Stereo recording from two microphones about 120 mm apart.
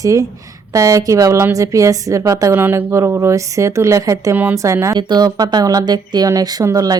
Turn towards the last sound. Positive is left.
turn(degrees=-30)  # may be behind; listen again after turning